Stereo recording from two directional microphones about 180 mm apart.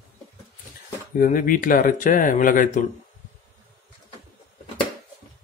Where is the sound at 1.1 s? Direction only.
50° left (ahead or behind).